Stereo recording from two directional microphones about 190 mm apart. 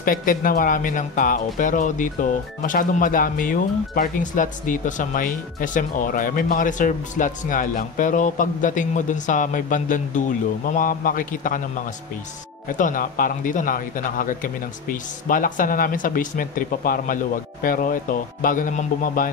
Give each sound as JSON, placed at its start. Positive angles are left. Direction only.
{"t": 0.0, "sound": "speech", "side_deg": 45}
{"t": 12.6, "sound": "speech", "side_deg": 45}